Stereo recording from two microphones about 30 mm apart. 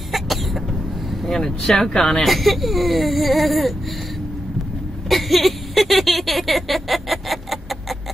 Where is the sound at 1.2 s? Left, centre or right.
Centre.